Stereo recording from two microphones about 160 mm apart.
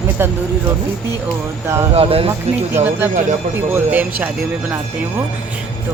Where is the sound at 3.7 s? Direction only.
10° right (ahead or behind).